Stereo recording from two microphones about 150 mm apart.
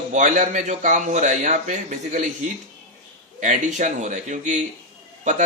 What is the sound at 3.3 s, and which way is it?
A man's voice, 55° right (ahead or behind).